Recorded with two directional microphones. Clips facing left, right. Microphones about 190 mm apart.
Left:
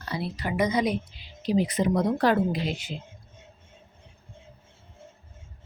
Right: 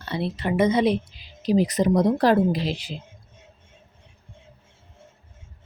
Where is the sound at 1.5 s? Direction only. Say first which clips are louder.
Right 4 dB; 40° right (ahead or behind).